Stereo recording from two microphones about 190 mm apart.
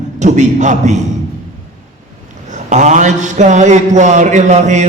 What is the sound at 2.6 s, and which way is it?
A man's voice, 40° right (ahead or behind).